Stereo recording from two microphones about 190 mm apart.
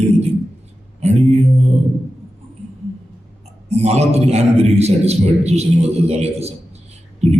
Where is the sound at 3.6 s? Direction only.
35° right (ahead or behind).